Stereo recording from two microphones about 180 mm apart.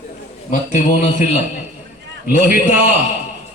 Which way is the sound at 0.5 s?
40° left (ahead or behind).